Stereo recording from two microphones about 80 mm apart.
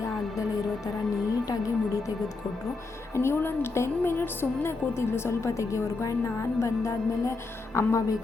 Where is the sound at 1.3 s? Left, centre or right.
Left.